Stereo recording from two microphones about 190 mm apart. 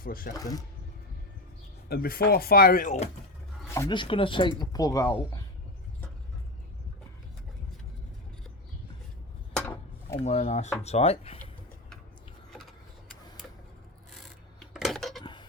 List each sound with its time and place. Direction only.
0.0 s speech: 50° left (ahead or behind)
0.3 s speech: 20° left (ahead or behind)
1.9 s speech: 55° left (ahead or behind)
3.7 s speech: 20° left (ahead or behind)
9.6 s a sound: 10° left (ahead or behind)
10.2 s speech: 35° left (ahead or behind)
14.7 s dishes: centre (ahead or behind)
15.2 s a sound: 25° left (ahead or behind)